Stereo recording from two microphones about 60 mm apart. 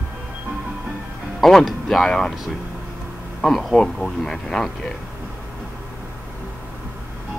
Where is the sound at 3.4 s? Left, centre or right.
Centre.